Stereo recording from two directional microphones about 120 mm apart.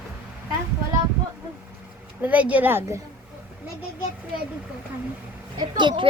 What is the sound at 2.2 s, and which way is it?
Speech, 10° right (ahead or behind).